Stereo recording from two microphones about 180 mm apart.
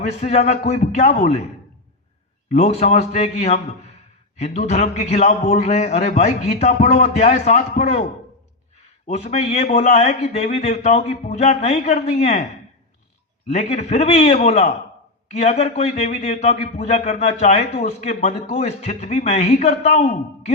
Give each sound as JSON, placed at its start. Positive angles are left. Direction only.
{"t": 0.1, "sound": "a man's voice", "side_deg": 40}
{"t": 2.5, "sound": "a man's voice", "side_deg": 40}
{"t": 9.0, "sound": "a man's voice", "side_deg": 35}
{"t": 13.5, "sound": "a man's voice", "side_deg": 35}